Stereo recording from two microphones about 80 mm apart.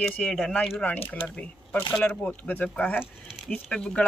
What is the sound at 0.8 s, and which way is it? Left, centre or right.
Speech, centre.